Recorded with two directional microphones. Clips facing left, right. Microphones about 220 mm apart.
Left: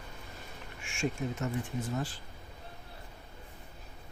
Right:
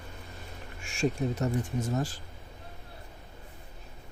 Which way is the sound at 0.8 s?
35° right (ahead or behind).